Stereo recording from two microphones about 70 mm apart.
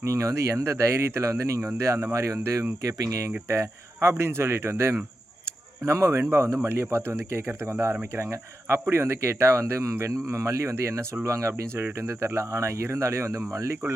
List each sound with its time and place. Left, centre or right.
0.0 s speech: right